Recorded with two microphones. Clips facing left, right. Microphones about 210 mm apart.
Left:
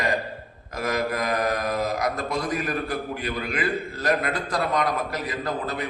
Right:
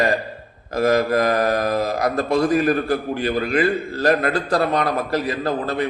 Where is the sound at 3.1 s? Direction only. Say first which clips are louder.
Right 8 dB; 30° right (ahead or behind).